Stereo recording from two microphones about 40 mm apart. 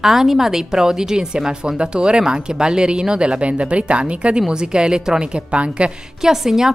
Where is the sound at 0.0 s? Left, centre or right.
Centre.